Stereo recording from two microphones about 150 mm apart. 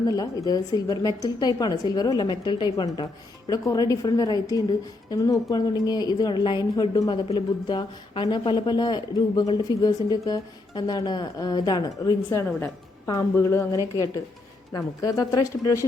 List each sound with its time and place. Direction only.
0.1 s speech: 25° left (ahead or behind)